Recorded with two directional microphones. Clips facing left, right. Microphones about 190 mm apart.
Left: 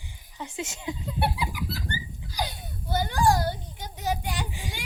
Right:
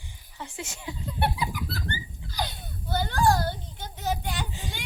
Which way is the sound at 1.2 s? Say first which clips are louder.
Right 1 dB; 5° left (ahead or behind).